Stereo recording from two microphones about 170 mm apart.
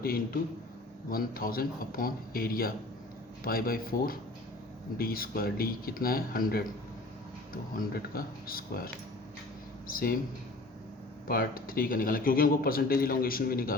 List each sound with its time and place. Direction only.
0.0 s speech: 60° left (ahead or behind)
11.3 s speech: 60° left (ahead or behind)